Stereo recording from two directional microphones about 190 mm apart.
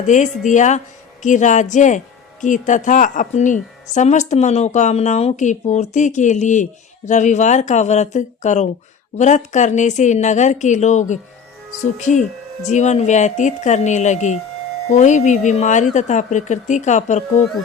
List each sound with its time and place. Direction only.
0.1 s a woman's voice: 40° left (ahead or behind)